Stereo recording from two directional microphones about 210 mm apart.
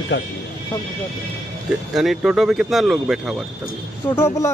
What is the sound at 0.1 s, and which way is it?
Speech, 60° left (ahead or behind).